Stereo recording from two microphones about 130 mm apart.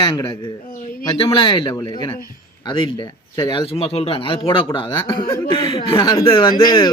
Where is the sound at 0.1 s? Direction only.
30° left (ahead or behind).